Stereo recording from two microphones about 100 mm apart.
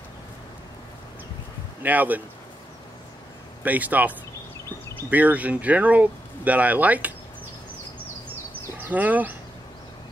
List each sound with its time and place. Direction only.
1.8 s speech: 15° right (ahead or behind)
3.6 s speech: 15° right (ahead or behind)
8.8 s speech: 15° right (ahead or behind)